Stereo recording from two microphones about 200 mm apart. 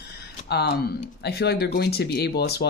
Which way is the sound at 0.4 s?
55° left (ahead or behind).